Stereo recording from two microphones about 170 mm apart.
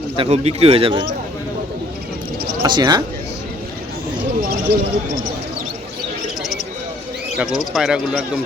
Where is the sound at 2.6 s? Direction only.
25° right (ahead or behind).